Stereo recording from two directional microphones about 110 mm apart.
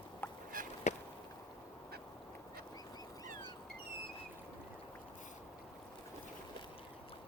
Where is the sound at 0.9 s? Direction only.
90° left.